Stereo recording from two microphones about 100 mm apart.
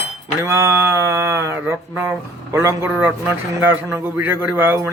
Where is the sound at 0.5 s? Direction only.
25° right (ahead or behind).